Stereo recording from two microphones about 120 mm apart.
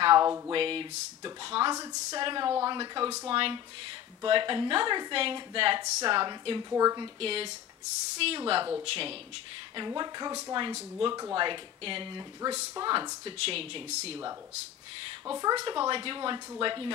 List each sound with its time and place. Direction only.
0.0 s a sound: 40° right (ahead or behind)
0.5 s speech: 50° right (ahead or behind)
1.8 s speech: 30° right (ahead or behind)
6.7 s speech: 30° right (ahead or behind)
7.2 s speech: 50° right (ahead or behind)
9.8 s speech: 35° right (ahead or behind)
12.4 s speech: 25° right (ahead or behind)
12.7 s speech: 35° right (ahead or behind); by 14.1 s 55° right (ahead or behind)
15.2 s speech: 30° right (ahead or behind)
15.7 s speech: 40° right (ahead or behind)